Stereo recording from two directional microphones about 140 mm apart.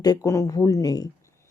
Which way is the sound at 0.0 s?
25° left (ahead or behind).